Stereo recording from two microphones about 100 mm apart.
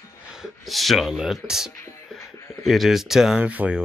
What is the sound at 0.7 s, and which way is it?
Speech, centre (ahead or behind).